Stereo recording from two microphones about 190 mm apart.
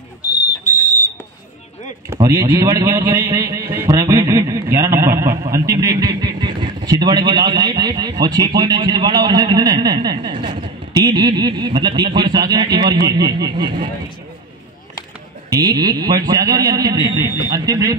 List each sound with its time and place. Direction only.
0.8 s a sound: 40° left (ahead or behind)
2.1 s a man's voice: 15° right (ahead or behind)
15.5 s a man's voice: 20° right (ahead or behind)